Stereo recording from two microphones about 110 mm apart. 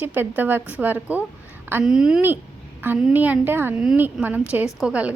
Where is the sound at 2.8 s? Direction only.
15° right (ahead or behind).